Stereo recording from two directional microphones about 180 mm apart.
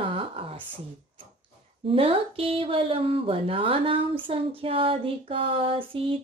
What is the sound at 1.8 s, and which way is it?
A woman's voice, 30° right (ahead or behind).